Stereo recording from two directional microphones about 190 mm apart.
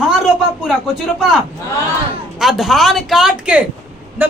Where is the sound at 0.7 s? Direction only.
Centre (ahead or behind).